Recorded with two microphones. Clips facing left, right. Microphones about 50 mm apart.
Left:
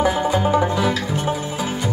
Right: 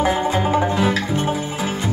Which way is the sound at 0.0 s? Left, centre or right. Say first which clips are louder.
Even; right.